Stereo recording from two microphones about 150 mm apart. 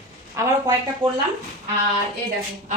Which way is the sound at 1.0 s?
35° right (ahead or behind).